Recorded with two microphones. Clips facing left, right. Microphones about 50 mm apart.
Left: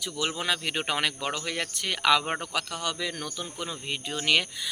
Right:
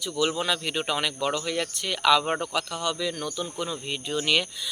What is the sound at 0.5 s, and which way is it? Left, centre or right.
Speech, left.